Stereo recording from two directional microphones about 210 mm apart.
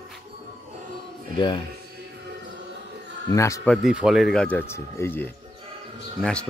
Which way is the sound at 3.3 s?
15° left (ahead or behind).